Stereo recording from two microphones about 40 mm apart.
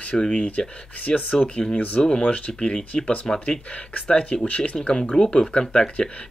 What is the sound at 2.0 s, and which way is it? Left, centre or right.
Speech, centre.